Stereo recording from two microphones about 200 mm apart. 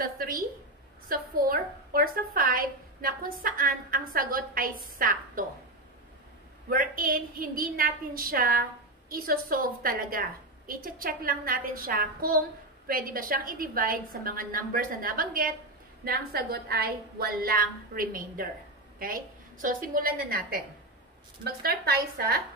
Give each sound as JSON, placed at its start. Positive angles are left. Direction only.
{"t": 0.0, "sound": "a sound", "side_deg": -45}
{"t": 1.0, "sound": "a woman's voice", "side_deg": -45}
{"t": 6.7, "sound": "a woman's voice", "side_deg": -45}